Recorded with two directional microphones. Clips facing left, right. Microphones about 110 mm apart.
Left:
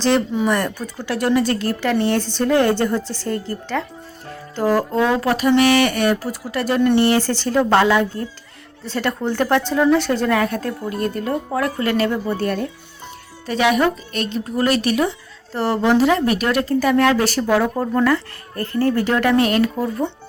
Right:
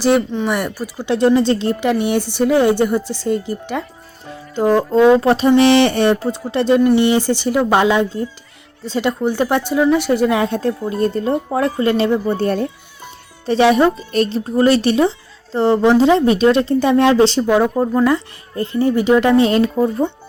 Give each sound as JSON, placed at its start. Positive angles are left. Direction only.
{"t": 0.5, "sound": "a woman's voice", "side_deg": -10}
{"t": 1.0, "sound": "a woman's voice", "side_deg": -20}